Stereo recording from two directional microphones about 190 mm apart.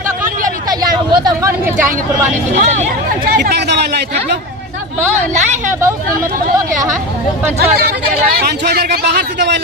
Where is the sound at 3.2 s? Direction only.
55° right (ahead or behind).